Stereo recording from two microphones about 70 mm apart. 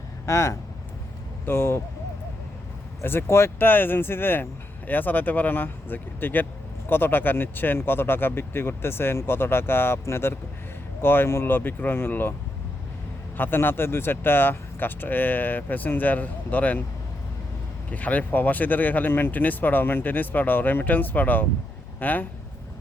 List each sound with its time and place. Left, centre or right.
0.3 s speech: left
3.0 s speech: left
3.7 s speech: left
13.3 s speech: left
17.9 s speech: left